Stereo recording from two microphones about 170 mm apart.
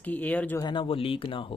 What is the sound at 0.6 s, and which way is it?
Speech, 30° left (ahead or behind).